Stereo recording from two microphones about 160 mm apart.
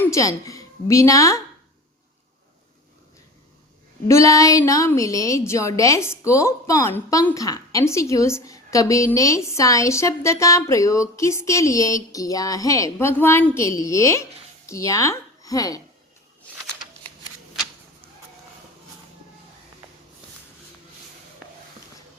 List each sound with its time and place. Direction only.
0.0 s a woman's voice: 20° left (ahead or behind)
4.1 s a woman's voice: 20° left (ahead or behind)